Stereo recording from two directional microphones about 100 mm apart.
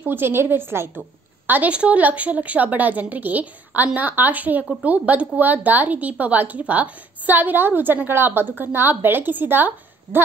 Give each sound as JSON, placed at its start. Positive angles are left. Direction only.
{"t": 0.0, "sound": "a woman's voice", "side_deg": -20}